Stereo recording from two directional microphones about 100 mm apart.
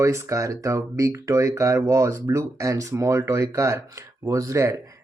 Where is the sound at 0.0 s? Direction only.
30° right (ahead or behind).